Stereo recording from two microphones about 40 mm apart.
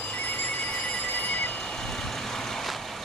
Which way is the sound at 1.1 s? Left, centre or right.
Left.